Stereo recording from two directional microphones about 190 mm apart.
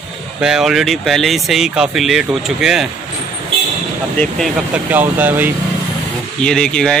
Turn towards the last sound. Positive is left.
turn(degrees=5)  # may be behind; listen again after turning